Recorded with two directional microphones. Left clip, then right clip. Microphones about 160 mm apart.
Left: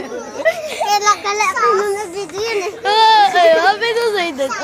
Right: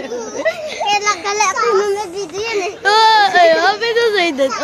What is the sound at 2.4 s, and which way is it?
Speech, 15° right (ahead or behind).